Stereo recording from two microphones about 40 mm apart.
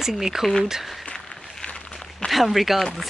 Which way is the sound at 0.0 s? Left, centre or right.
Centre.